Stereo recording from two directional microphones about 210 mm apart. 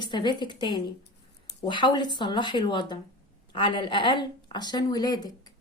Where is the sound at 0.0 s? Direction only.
20° left (ahead or behind).